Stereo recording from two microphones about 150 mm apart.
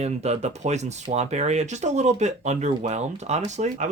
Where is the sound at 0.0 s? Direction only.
45° right (ahead or behind).